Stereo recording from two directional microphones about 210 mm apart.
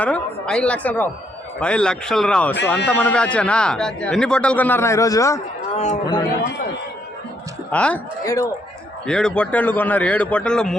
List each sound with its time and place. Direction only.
0.0 s a woman's voice: 5° left (ahead or behind)
5.7 s a man's voice: 35° left (ahead or behind)
7.7 s a woman's voice: 5° left (ahead or behind)
9.0 s a man's voice: 5° left (ahead or behind)